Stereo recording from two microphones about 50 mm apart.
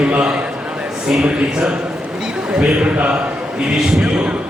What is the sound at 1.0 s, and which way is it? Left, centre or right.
A man's voice, centre.